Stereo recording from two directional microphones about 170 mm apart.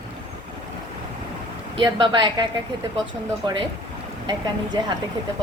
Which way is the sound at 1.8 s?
30° right (ahead or behind).